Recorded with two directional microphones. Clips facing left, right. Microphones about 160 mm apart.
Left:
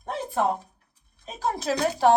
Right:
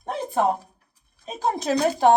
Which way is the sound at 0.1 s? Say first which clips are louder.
Right 3 dB; 15° right (ahead or behind).